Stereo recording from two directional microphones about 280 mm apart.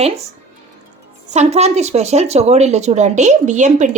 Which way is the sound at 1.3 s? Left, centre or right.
Right.